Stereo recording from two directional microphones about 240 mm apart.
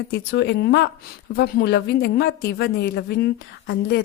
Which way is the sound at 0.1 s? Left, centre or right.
Left.